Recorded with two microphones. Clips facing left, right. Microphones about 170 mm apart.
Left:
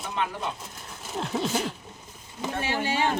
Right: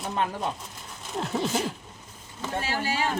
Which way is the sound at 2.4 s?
20° left (ahead or behind).